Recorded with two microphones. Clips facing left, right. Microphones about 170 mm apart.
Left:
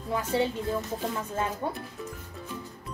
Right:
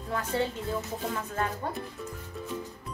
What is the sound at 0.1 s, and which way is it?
Speech, 15° left (ahead or behind).